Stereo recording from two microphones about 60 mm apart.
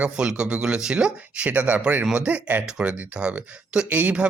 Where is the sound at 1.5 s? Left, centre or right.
Right.